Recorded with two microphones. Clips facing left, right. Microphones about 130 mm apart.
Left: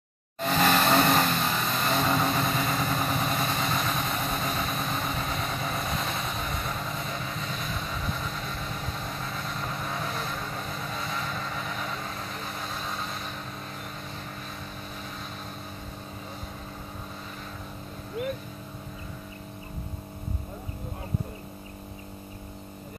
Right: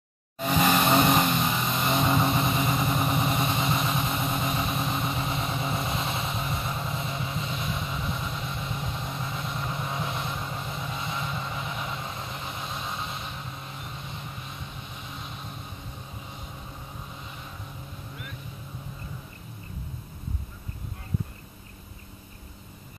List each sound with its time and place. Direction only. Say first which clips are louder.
0.4 s vehicle: even; 10° right (ahead or behind)